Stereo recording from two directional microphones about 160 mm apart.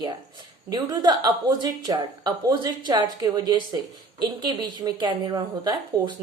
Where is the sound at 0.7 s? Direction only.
25° right (ahead or behind).